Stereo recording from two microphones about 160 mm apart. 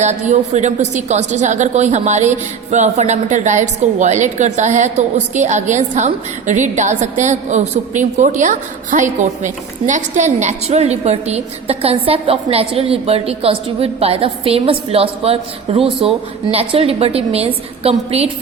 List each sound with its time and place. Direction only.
0.0 s a woman's voice: 45° right (ahead or behind)